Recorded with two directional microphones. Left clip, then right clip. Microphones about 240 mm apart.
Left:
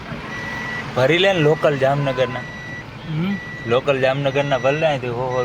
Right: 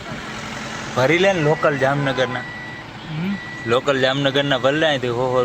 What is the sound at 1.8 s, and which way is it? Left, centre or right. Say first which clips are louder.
Speech: left 1 dB; centre.